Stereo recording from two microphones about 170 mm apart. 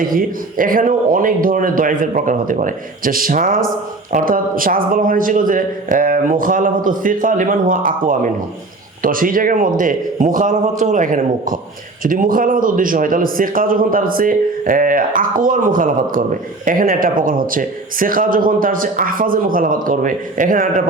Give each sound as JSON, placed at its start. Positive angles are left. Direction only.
{"t": 0.0, "sound": "a man's voice", "side_deg": -55}